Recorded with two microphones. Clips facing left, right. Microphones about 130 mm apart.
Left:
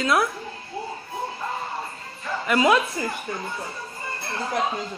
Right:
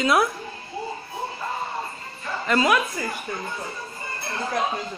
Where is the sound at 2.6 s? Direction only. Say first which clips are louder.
Left 4 dB; 20° left (ahead or behind).